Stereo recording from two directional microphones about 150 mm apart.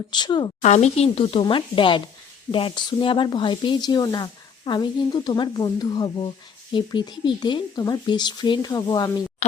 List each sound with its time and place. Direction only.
0.1 s speech: 30° left (ahead or behind)
0.6 s speech: 50° left (ahead or behind); by 9.2 s 30° left (ahead or behind)